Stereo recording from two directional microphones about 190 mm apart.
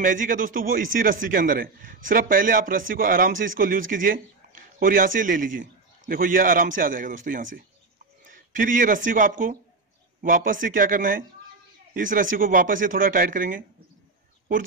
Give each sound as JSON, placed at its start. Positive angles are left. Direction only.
{"t": 0.0, "sound": "a man's voice", "side_deg": -45}